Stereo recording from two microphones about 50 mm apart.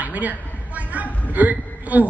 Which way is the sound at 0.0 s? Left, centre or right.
Right.